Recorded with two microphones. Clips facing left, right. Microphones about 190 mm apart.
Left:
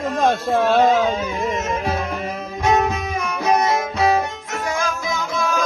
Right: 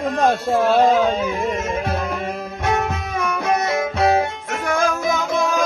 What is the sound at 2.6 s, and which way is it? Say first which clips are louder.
Music: left 4 dB; 60° right (ahead or behind).